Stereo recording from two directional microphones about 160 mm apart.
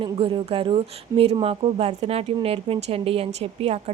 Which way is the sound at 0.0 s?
35° right (ahead or behind).